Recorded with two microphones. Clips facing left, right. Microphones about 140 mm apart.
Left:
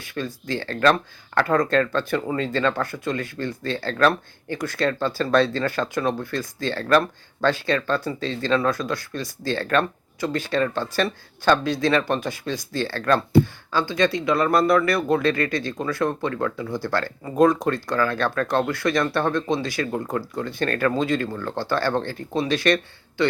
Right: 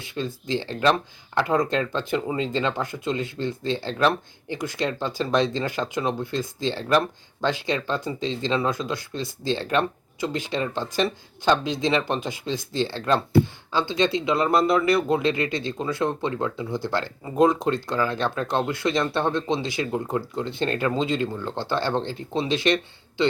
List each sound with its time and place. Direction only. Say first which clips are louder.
0.0 s speech: even; 20° right (ahead or behind)